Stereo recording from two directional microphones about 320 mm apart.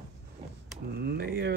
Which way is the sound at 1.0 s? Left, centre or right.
Right.